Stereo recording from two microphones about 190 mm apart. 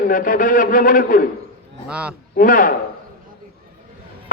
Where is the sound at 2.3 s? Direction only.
45° left (ahead or behind).